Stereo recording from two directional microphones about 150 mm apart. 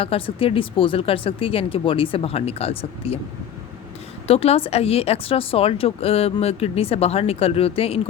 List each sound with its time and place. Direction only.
0.0 s speech: 40° left (ahead or behind)
4.3 s speech: 40° left (ahead or behind)